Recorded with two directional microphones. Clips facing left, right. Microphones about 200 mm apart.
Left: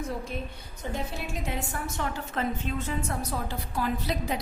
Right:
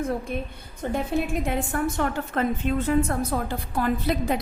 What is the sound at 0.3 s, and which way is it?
A woman's voice, 55° right (ahead or behind).